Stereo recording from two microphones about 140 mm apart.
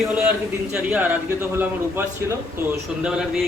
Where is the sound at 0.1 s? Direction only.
10° right (ahead or behind).